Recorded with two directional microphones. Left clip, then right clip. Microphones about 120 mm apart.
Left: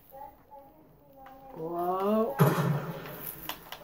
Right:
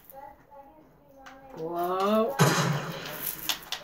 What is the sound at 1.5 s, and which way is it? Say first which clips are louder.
Speech: right 2 dB; 15° right (ahead or behind).